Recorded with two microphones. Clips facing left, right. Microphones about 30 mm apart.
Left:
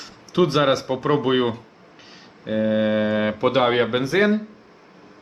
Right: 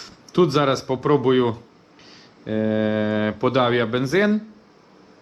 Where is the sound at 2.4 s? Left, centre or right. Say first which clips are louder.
Left 1 dB; left.